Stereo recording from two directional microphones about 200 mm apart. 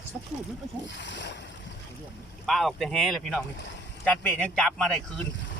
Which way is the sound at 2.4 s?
Centre (ahead or behind).